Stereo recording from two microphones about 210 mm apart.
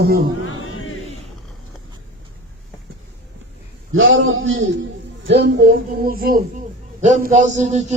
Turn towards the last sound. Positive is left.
turn(degrees=-35)  # may be behind; listen again after turning